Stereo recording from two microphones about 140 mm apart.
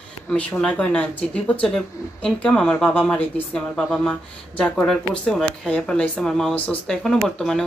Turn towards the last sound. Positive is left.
turn(degrees=5)  # may be behind; listen again after turning